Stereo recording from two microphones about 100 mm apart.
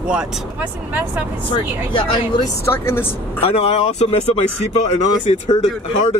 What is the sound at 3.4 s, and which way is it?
Speech, 80° left.